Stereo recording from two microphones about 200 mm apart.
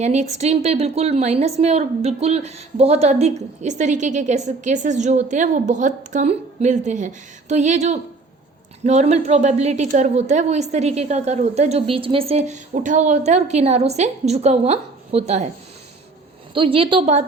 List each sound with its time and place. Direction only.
0.0 s a woman's voice: 35° right (ahead or behind)
16.6 s a woman's voice: 25° right (ahead or behind)